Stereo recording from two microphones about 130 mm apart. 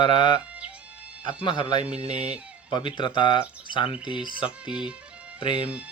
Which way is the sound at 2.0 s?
55° right (ahead or behind).